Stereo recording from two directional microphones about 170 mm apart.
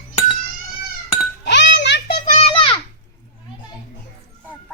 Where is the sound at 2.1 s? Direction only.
35° left (ahead or behind).